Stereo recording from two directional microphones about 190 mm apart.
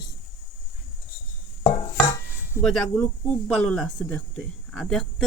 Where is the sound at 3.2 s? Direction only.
5° left (ahead or behind).